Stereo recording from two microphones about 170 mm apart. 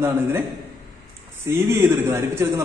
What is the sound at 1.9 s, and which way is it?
Speech, 15° right (ahead or behind).